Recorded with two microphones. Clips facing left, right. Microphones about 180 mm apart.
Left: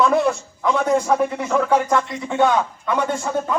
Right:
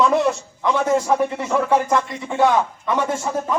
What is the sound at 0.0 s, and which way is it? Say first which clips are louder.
A man's voice: even; centre (ahead or behind).